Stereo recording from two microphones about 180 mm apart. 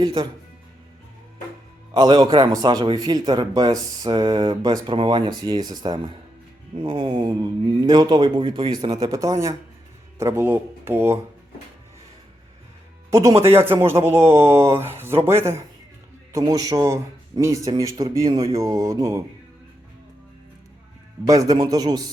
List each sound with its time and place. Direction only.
0.0 s a man's voice: 30° right (ahead or behind)
1.9 s a man's voice: 20° right (ahead or behind)
13.1 s a man's voice: 15° right (ahead or behind)
21.2 s a man's voice: 20° right (ahead or behind)